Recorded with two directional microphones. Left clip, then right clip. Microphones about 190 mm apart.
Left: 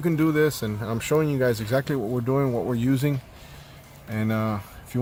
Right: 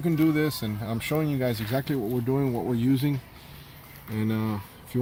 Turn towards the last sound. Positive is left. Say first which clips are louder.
# left 3 dB
turn(degrees=15)  # may be behind; listen again after turning